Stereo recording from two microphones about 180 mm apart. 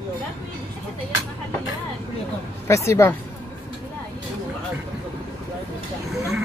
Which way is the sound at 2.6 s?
15° left (ahead or behind).